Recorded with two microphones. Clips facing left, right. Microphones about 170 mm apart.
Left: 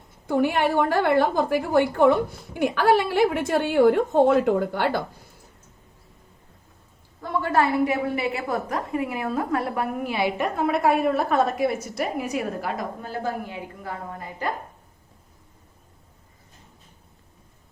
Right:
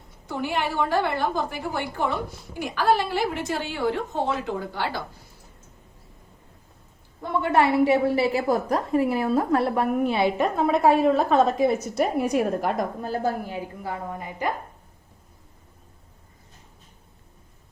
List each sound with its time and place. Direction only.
0.3 s a woman's voice: 55° left (ahead or behind)
7.2 s a woman's voice: 20° right (ahead or behind)
12.6 s a woman's voice: 40° right (ahead or behind)
13.8 s a woman's voice: 15° right (ahead or behind)